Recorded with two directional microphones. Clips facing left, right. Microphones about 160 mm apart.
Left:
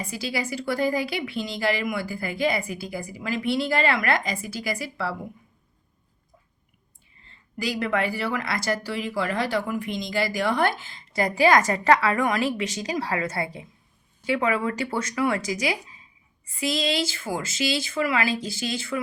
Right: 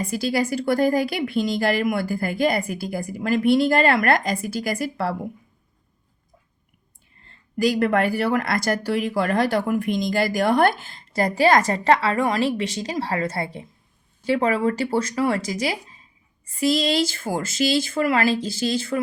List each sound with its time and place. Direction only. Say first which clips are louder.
0.1 s speech: right 7 dB; 50° right (ahead or behind)
7.2 s speech: right 11 dB; 50° right (ahead or behind)
11.2 s a woman's voice: right 2 dB; 35° right (ahead or behind)